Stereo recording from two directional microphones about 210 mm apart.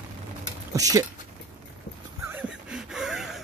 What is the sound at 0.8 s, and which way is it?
Speech, 15° right (ahead or behind).